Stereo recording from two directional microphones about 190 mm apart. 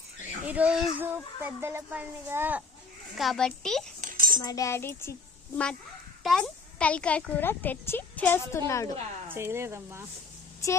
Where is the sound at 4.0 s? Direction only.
45° right (ahead or behind).